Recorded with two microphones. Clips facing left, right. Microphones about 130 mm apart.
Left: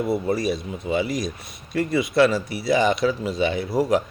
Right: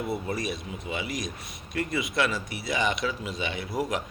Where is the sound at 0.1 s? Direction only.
30° left (ahead or behind).